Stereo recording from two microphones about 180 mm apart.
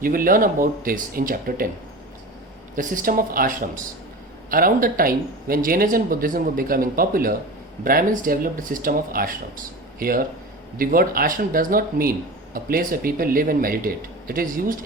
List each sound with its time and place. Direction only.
0.0 s speech: 50° right (ahead or behind)
2.7 s speech: 50° right (ahead or behind)